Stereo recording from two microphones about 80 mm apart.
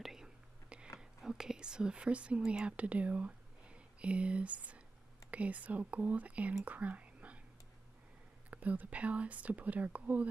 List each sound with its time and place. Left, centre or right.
0.0 s whispering: centre
0.9 s speech: centre
6.6 s whispering: centre
8.5 s speech: centre